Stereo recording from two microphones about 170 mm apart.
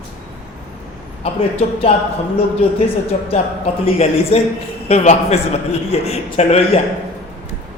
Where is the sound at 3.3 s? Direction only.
40° left (ahead or behind).